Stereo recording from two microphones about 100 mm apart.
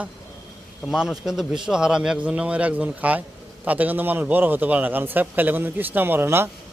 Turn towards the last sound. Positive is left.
turn(degrees=-25)  # may be behind; listen again after turning